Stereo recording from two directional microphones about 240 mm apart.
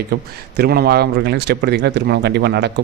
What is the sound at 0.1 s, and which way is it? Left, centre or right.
A man's voice, right.